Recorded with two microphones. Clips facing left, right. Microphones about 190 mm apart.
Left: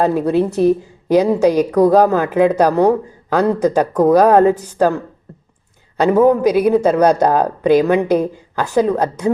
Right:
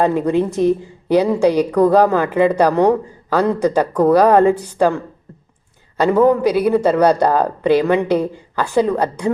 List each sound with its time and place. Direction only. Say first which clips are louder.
0.0 s a woman's voice: left 1 dB; 10° left (ahead or behind)
6.0 s a woman's voice: left 1 dB; 10° left (ahead or behind)